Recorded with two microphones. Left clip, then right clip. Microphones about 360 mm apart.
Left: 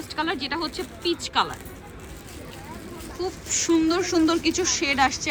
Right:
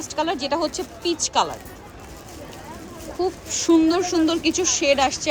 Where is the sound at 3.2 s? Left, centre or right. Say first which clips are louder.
Right 4 dB; centre.